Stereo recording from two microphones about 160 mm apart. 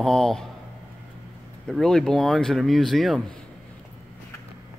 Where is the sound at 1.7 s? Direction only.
5° left (ahead or behind).